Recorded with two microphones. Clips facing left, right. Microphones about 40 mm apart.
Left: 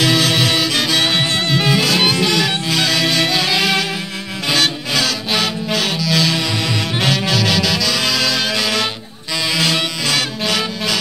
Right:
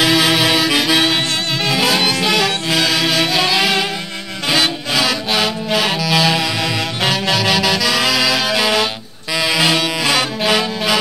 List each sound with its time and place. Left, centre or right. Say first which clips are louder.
0.0 s music: right 2 dB; centre
1.0 s music: even; centre